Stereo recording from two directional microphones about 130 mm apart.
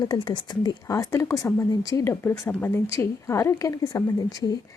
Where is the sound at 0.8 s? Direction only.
25° left (ahead or behind).